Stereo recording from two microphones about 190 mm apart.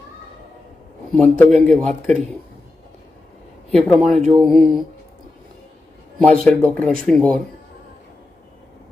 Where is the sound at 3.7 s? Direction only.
Centre (ahead or behind).